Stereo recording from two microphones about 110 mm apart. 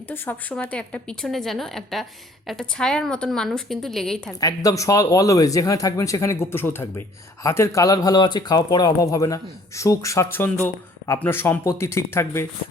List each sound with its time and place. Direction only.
0.1 s a woman's voice: 20° left (ahead or behind)
4.4 s speech: 35° left (ahead or behind)